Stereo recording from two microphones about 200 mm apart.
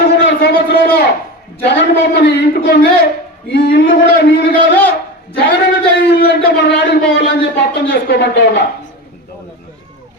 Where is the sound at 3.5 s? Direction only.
55° left (ahead or behind).